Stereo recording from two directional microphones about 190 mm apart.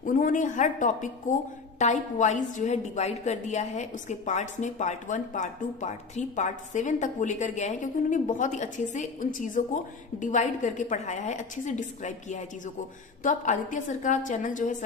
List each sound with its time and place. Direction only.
0.0 s a woman's voice: 45° left (ahead or behind)